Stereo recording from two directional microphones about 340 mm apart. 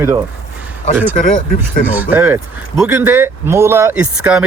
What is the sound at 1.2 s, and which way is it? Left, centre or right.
Speech, left.